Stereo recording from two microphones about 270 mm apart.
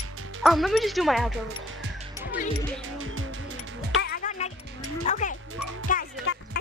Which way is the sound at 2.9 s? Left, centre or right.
Right.